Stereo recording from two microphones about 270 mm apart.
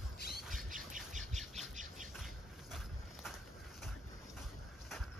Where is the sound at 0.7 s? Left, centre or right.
Right.